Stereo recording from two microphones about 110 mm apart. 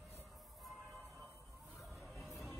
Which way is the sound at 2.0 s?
5° left (ahead or behind).